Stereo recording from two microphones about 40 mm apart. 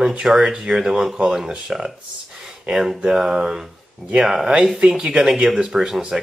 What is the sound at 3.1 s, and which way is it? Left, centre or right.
Speech, centre.